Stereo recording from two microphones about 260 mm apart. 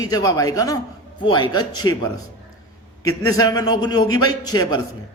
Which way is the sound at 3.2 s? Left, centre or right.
Centre.